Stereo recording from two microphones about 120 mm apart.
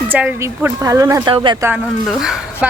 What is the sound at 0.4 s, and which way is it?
Speech, 25° right (ahead or behind).